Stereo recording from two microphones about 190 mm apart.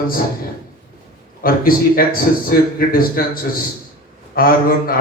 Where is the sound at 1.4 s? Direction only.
50° left (ahead or behind).